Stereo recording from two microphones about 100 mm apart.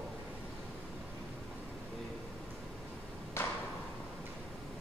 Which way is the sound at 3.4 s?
25° left (ahead or behind).